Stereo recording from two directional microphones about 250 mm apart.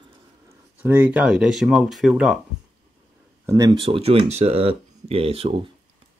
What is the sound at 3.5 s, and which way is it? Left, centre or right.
Speech, centre.